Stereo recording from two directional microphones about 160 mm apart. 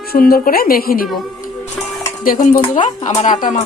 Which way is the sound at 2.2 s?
55° left (ahead or behind).